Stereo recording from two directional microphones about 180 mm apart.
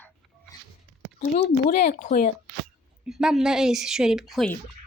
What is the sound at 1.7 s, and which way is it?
Speech, 50° left (ahead or behind).